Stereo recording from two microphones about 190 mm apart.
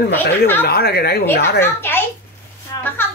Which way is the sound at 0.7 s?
55° left (ahead or behind).